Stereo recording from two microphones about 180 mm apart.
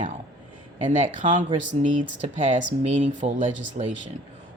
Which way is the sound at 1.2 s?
45° right (ahead or behind).